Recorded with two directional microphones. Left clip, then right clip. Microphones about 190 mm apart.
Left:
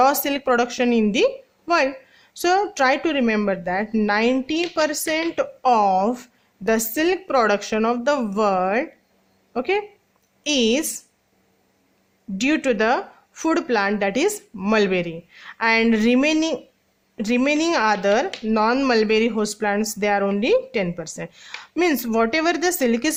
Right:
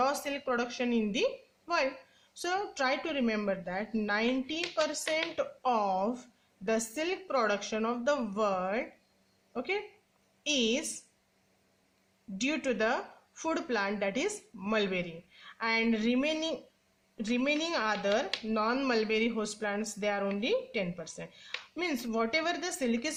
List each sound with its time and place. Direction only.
0.0 s speech: 45° left (ahead or behind)
12.4 s speech: 40° left (ahead or behind)